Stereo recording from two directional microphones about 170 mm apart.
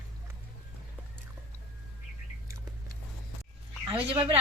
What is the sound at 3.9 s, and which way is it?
Speech, 30° right (ahead or behind).